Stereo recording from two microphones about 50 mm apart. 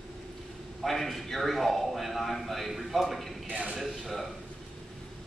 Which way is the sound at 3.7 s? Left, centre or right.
Centre.